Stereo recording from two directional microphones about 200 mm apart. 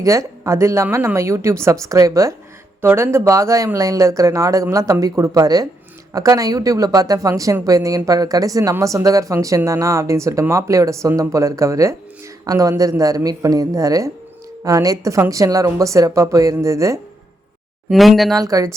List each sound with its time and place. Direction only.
0.0 s speech: 15° right (ahead or behind)
17.8 s speech: centre (ahead or behind)
18.3 s speech: 15° right (ahead or behind)